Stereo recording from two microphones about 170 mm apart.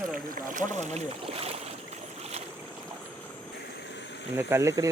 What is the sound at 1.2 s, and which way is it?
Speech, 35° right (ahead or behind).